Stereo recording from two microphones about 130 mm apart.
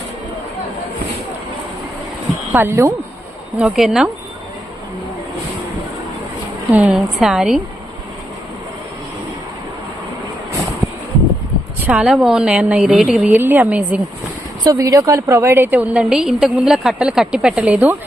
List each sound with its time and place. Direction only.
2.5 s speech: 15° right (ahead or behind)
3.6 s a woman's voice: 5° right (ahead or behind)
6.7 s a woman's voice: 5° right (ahead or behind)
11.9 s a woman's voice: 10° right (ahead or behind)
14.6 s a woman's voice: 25° right (ahead or behind); by 17.9 s 10° right (ahead or behind)